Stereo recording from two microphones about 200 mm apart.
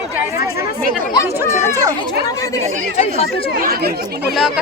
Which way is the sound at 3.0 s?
30° left (ahead or behind).